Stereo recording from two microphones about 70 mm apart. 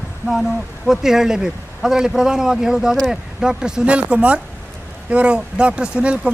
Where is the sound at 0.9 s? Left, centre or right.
Centre.